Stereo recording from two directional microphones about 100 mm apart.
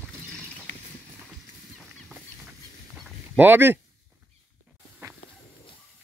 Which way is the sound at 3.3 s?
20° right (ahead or behind).